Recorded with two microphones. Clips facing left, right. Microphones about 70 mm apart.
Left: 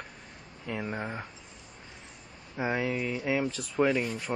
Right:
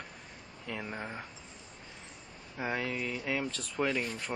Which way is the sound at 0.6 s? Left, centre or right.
Centre.